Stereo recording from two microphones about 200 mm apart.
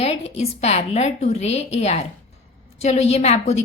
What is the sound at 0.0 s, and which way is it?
A woman's voice, 30° left (ahead or behind).